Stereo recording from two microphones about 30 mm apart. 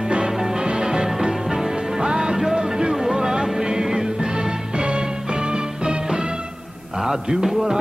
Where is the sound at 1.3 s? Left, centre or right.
Centre.